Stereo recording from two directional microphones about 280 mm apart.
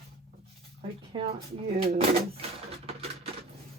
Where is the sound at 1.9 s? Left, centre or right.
Right.